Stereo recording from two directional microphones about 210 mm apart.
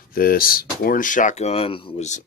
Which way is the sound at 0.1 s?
45° left (ahead or behind).